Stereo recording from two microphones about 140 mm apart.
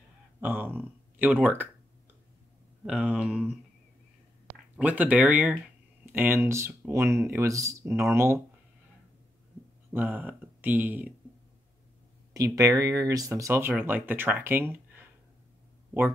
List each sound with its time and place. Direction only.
0.4 s speech: 15° right (ahead or behind)
2.9 s speech: 10° right (ahead or behind)
4.7 s speech: 10° right (ahead or behind)
9.9 s speech: 15° right (ahead or behind)
12.4 s speech: 25° right (ahead or behind)